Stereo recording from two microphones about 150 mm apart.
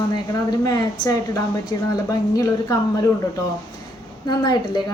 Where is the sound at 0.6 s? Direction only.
25° left (ahead or behind).